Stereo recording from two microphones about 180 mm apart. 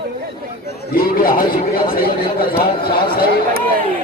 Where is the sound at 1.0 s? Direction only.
55° left (ahead or behind).